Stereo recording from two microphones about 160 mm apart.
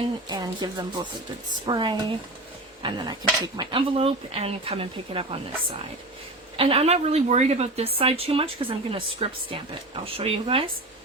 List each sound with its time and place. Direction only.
0.3 s a woman's voice: 25° right (ahead or behind)
6.6 s a woman's voice: 35° right (ahead or behind)